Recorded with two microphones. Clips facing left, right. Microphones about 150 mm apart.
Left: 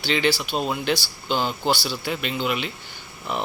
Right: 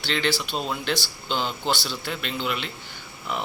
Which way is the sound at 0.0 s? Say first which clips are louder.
Left 3 dB; 10° left (ahead or behind).